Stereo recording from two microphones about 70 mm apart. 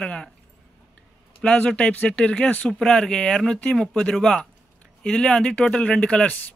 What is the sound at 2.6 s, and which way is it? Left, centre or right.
Speech, centre.